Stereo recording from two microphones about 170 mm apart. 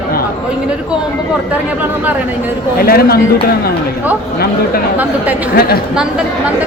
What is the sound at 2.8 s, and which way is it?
Speech, 65° left (ahead or behind).